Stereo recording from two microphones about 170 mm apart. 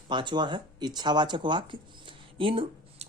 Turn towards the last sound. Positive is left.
turn(degrees=-30)  # may be behind; listen again after turning